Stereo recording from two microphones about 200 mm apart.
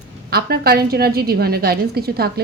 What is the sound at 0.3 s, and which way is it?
A woman's voice, 50° right (ahead or behind).